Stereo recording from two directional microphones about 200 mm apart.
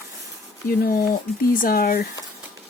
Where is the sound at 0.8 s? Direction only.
45° left (ahead or behind).